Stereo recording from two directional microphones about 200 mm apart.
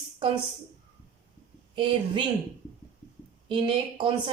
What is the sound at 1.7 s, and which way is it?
Speech, 25° right (ahead or behind).